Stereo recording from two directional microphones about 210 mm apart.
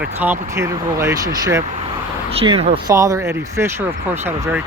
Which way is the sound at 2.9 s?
15° right (ahead or behind).